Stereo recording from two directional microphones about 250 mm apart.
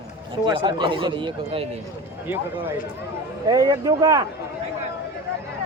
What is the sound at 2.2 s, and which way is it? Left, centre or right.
Speech, centre.